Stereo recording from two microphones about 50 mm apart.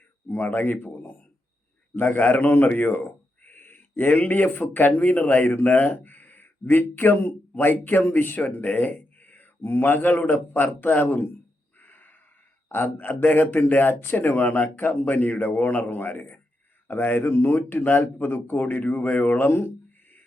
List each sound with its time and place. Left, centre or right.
0.3 s a man's voice: left
8.4 s speech: left
11.8 s gasp: left
12.6 s speech: left
19.5 s speech: left